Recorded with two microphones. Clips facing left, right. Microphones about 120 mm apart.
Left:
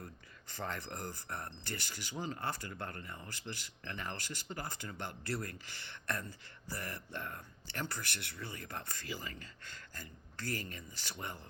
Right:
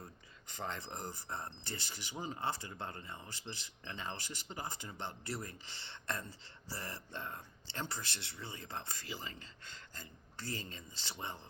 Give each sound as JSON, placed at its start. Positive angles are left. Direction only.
{"t": 0.0, "sound": "speech", "side_deg": -20}